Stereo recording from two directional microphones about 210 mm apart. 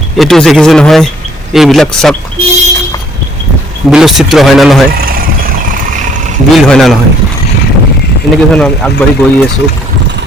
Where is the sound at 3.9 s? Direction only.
Centre (ahead or behind).